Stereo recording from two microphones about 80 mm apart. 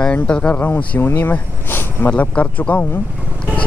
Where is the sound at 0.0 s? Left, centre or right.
Centre.